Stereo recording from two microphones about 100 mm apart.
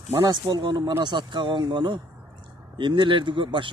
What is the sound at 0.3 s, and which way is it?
Speech, 50° right (ahead or behind).